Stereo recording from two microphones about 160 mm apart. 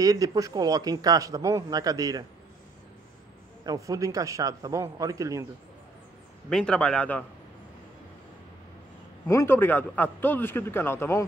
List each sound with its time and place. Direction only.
0.0 s speech: 20° right (ahead or behind)
3.6 s speech: 20° right (ahead or behind)
6.5 s a man's voice: 5° left (ahead or behind)
9.3 s a man's voice: 15° left (ahead or behind)